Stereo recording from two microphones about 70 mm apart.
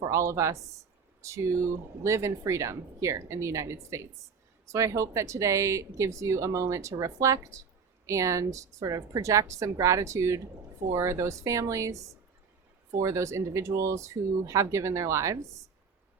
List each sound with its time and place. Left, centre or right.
0.0 s speech: right